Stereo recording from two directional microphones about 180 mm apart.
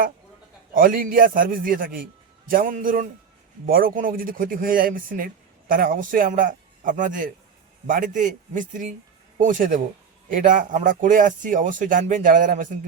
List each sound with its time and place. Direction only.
0.7 s speech: 50° right (ahead or behind)